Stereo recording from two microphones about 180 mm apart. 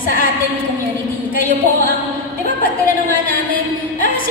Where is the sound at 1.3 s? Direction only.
50° left (ahead or behind).